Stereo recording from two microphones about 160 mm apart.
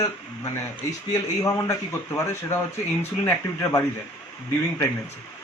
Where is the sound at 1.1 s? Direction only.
20° left (ahead or behind).